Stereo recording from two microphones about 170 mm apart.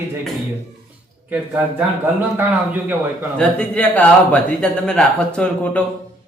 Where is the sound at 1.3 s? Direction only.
10° right (ahead or behind).